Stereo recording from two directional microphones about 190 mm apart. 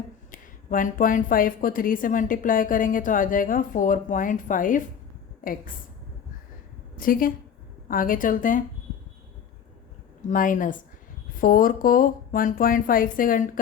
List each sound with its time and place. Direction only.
0.3 s a woman's voice: 45° left (ahead or behind)
6.9 s a woman's voice: 50° left (ahead or behind)
10.2 s a woman's voice: 45° left (ahead or behind)